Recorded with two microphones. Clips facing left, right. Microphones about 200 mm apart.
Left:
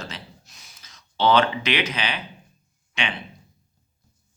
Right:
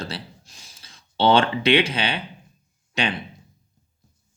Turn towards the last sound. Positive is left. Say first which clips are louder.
# right 5 dB
turn(degrees=-40)  # may be behind; listen again after turning